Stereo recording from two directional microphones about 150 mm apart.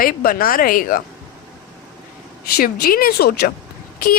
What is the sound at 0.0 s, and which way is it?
A woman's voice, 80° left.